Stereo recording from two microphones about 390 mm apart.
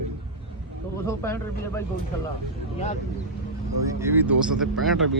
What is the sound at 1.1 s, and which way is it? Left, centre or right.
Speech, centre.